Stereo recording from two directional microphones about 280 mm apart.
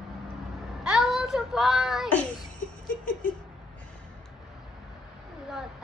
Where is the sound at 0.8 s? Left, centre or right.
Centre.